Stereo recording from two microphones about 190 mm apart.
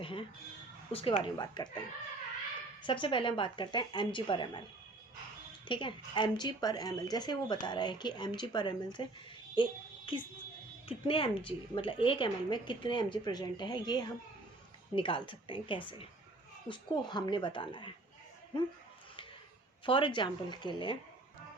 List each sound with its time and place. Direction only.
0.0 s music: 25° left (ahead or behind)
0.9 s speech: 30° left (ahead or behind)
2.8 s speech: 25° left (ahead or behind)
5.6 s speech: 25° left (ahead or behind)
10.8 s speech: 25° left (ahead or behind)
19.8 s speech: 25° left (ahead or behind)